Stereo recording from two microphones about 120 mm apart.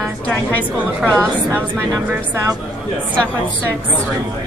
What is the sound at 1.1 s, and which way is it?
Speech, 20° right (ahead or behind).